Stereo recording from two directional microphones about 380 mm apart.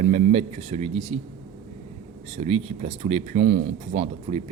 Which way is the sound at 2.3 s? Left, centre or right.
Centre.